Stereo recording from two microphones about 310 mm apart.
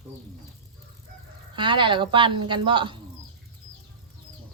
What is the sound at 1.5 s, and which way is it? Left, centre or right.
A woman's voice, centre.